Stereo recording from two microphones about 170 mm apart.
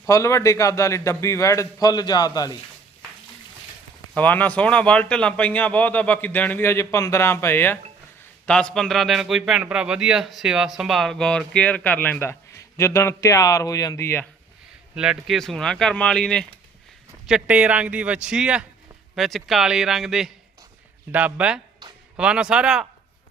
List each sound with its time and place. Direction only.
0.1 s a man's voice: 15° left (ahead or behind)
4.1 s a man's voice: 10° left (ahead or behind)
14.9 s a man's voice: 5° right (ahead or behind)